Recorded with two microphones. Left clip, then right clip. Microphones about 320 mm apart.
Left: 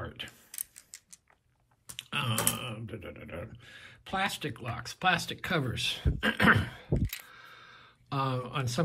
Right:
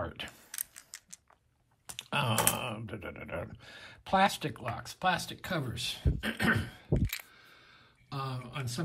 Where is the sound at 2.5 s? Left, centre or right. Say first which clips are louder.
Right 2 dB; centre.